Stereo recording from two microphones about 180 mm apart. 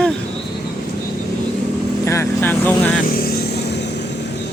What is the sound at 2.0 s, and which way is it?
Speech, 15° left (ahead or behind).